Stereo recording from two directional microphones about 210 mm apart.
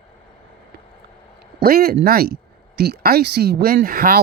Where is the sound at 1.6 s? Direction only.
45° right (ahead or behind).